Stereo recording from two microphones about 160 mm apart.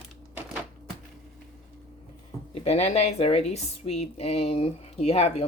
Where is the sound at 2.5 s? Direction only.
40° left (ahead or behind).